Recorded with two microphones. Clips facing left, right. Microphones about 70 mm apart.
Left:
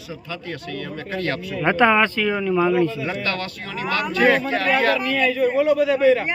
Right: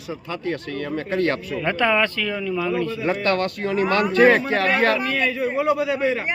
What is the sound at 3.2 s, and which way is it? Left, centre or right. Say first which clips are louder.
A man's voice: right 5 dB; right.